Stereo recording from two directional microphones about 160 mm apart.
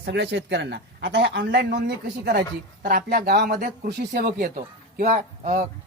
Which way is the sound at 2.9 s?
60° right (ahead or behind).